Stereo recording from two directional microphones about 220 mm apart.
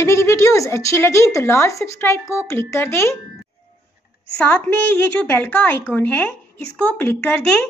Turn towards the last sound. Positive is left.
turn(degrees=5)  # may be behind; listen again after turning